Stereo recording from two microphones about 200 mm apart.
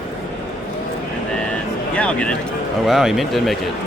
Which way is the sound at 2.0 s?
5° left (ahead or behind).